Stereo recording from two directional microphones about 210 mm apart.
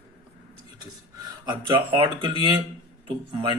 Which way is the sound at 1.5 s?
25° right (ahead or behind).